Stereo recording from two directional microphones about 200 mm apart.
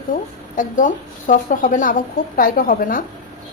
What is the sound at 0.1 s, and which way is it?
A woman's voice, 40° left (ahead or behind).